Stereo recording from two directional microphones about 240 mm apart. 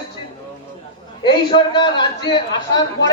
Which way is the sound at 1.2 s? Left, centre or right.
Centre.